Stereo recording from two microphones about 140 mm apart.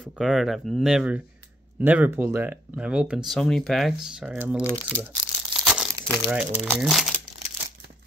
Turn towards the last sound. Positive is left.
turn(degrees=0)  # may be behind; listen again after turning